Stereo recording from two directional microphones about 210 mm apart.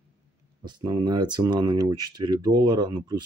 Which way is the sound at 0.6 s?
20° right (ahead or behind).